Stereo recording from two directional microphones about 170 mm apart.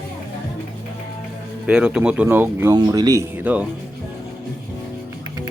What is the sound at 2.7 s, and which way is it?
Speech, 20° right (ahead or behind).